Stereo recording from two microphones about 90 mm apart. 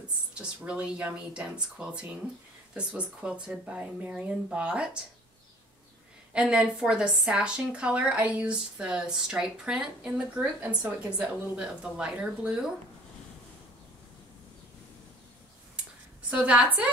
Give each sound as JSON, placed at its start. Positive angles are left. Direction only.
{"t": 0.3, "sound": "speech", "side_deg": -10}
{"t": 6.3, "sound": "speech", "side_deg": -10}
{"t": 10.4, "sound": "speech", "side_deg": -20}
{"t": 16.3, "sound": "speech", "side_deg": -15}